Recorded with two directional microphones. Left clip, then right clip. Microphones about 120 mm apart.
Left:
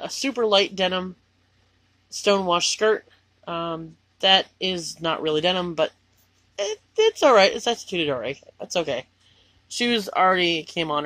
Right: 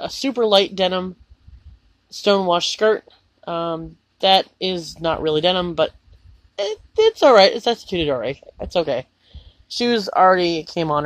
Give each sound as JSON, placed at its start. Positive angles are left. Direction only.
{"t": 0.0, "sound": "speech", "side_deg": -35}
{"t": 9.8, "sound": "speech", "side_deg": -25}